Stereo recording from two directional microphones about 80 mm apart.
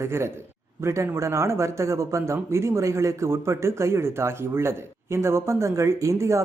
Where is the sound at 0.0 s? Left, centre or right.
Right.